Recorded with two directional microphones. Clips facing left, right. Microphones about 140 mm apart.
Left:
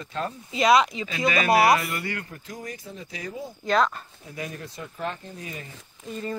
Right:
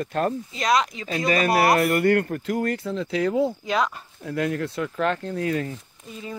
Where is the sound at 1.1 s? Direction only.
45° right (ahead or behind); by 5.7 s 75° right (ahead or behind).